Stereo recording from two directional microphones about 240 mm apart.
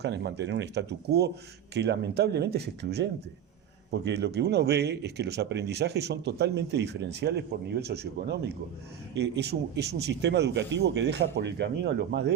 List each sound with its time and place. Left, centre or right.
0.0 s speech: right